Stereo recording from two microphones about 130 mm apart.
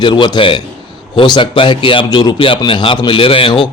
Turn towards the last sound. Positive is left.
turn(degrees=40)  # may be behind; listen again after turning